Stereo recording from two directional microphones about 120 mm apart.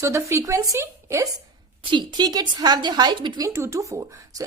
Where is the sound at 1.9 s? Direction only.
40° right (ahead or behind).